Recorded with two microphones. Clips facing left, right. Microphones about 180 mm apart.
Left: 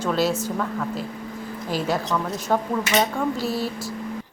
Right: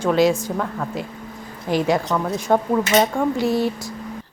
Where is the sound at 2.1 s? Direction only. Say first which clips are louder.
Right 4 dB; 15° right (ahead or behind).